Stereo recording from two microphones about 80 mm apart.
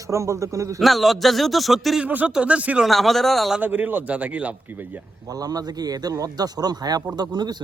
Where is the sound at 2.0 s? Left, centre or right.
Centre.